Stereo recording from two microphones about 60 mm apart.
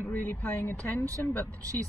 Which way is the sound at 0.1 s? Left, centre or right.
Left.